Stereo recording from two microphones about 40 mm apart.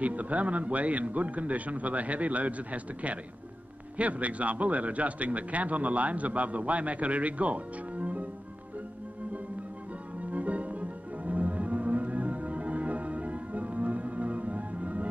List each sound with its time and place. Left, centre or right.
0.0 s a man's voice: right
10.3 s music: right